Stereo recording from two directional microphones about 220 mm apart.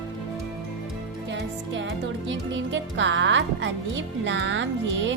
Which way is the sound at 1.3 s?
55° right (ahead or behind).